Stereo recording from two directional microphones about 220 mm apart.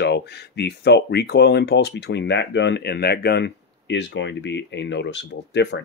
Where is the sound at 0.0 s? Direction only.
50° left (ahead or behind).